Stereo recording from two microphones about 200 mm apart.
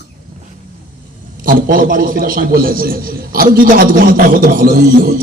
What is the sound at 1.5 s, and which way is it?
Speech, 45° right (ahead or behind).